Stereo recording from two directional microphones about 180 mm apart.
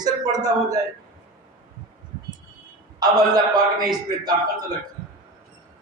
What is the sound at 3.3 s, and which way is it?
Speech, 20° right (ahead or behind).